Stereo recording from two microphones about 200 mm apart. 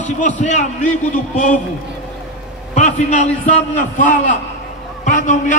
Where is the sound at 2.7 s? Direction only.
35° left (ahead or behind).